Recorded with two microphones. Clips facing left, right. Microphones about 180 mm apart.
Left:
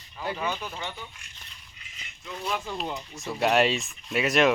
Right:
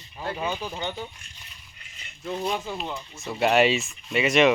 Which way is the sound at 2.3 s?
25° right (ahead or behind).